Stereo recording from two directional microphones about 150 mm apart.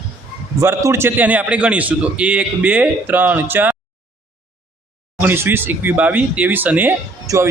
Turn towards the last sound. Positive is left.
turn(degrees=-20)  # may be behind; listen again after turning